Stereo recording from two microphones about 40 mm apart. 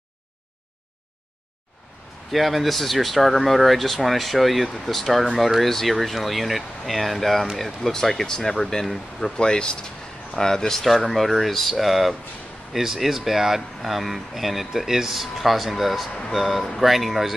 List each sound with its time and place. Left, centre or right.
2.3 s speech: centre
9.4 s speech: left
11.1 s speech: centre